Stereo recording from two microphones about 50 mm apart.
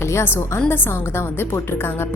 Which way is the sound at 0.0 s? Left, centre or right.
Left.